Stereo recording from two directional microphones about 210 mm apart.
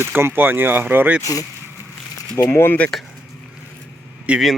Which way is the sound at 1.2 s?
15° left (ahead or behind).